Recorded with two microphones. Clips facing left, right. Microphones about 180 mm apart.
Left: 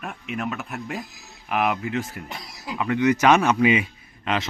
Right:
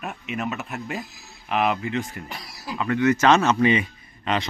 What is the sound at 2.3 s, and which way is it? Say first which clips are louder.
A man's voice: even; 20° left (ahead or behind).